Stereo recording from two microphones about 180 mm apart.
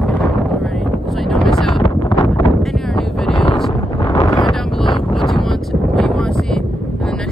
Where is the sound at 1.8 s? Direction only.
25° left (ahead or behind).